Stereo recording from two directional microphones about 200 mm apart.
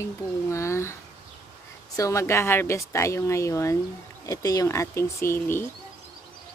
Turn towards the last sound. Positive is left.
turn(degrees=10)  # may be behind; listen again after turning